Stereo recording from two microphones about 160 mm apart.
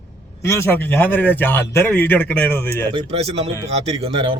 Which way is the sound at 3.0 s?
40° right (ahead or behind).